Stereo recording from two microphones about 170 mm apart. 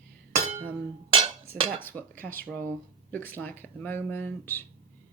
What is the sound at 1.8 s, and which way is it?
Speech, 10° left (ahead or behind).